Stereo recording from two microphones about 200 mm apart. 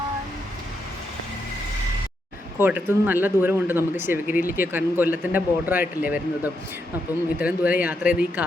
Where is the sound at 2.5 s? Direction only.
10° right (ahead or behind).